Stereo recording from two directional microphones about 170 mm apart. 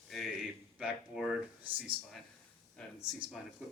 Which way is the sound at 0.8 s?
5° right (ahead or behind).